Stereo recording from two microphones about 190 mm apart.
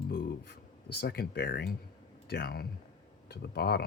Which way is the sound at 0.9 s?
55° left (ahead or behind).